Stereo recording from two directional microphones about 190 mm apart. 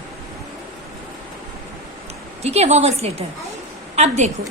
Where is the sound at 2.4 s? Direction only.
35° right (ahead or behind).